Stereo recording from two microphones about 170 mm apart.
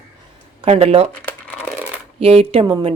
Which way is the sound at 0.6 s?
35° right (ahead or behind).